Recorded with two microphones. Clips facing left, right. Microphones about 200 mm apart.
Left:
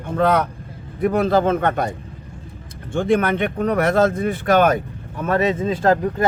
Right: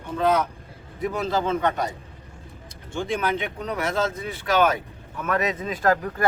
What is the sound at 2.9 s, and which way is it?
Speech, 55° left (ahead or behind).